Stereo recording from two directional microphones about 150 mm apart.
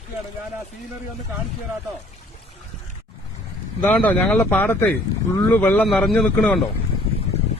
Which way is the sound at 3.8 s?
10° left (ahead or behind).